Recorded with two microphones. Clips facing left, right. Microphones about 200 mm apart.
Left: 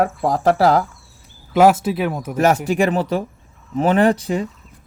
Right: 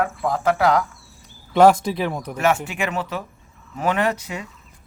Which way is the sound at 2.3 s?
35° left (ahead or behind).